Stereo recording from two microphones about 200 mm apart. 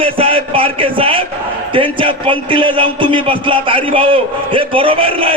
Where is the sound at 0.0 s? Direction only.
30° right (ahead or behind).